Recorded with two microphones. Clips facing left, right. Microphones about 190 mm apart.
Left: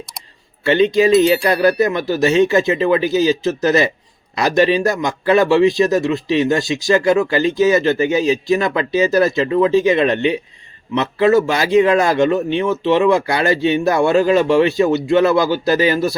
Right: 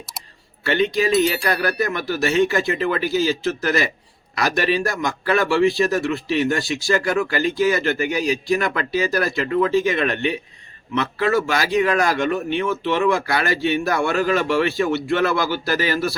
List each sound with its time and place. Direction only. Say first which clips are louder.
0.6 s a man's voice: left 6 dB; 20° left (ahead or behind)